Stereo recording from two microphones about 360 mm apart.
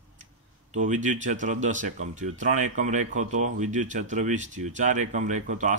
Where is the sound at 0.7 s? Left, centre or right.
Centre.